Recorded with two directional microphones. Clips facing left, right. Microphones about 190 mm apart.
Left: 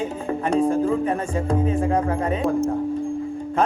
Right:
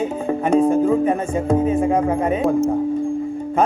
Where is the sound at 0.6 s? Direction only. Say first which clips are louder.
Right 4 dB; 20° right (ahead or behind).